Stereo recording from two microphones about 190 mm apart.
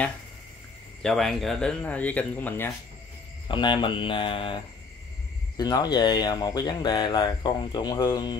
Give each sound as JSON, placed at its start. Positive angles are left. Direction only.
{"t": 1.0, "sound": "speech", "side_deg": 0}
{"t": 3.4, "sound": "speech", "side_deg": 25}
{"t": 5.6, "sound": "speech", "side_deg": 20}